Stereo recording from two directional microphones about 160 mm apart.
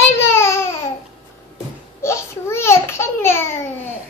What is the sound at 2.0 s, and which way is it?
A child's voice, 15° left (ahead or behind).